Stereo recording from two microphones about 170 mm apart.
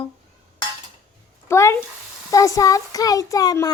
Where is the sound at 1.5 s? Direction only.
15° left (ahead or behind).